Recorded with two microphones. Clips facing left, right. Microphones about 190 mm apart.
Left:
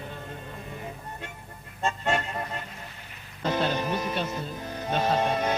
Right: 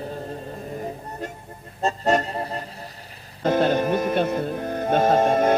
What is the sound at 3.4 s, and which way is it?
Music, 50° right (ahead or behind).